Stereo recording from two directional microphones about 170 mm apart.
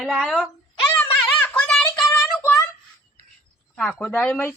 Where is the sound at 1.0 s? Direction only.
10° left (ahead or behind).